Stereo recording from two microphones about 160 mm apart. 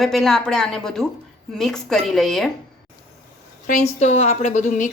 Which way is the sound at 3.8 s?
45° left (ahead or behind).